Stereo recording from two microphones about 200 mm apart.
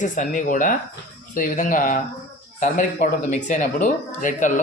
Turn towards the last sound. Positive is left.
turn(degrees=40)  # may be behind; listen again after turning